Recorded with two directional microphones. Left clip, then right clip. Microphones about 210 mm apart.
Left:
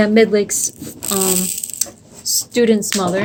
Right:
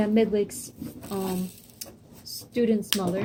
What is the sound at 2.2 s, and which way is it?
Speech, 30° left (ahead or behind).